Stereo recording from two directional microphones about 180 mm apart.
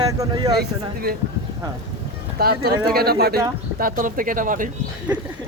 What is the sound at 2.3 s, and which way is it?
Speech, 60° right (ahead or behind).